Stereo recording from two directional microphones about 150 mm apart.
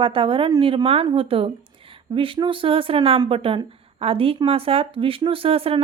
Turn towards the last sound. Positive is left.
turn(degrees=-40)  # may be behind; listen again after turning